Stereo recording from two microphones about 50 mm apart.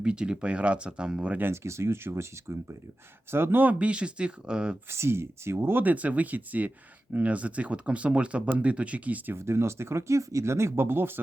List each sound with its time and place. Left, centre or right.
0.0 s speech: centre
1.6 s speech: right
3.3 s speech: right
3.8 s speech: right
4.9 s speech: right
5.8 s speech: right
9.3 s speech: right